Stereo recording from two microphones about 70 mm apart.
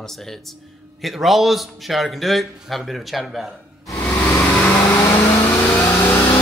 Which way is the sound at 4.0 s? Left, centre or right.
Left.